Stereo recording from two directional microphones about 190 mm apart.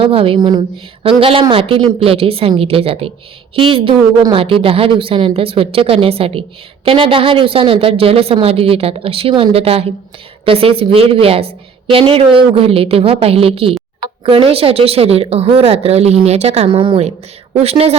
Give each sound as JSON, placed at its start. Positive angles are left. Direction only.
{"t": 0.0, "sound": "a woman's voice", "side_deg": -30}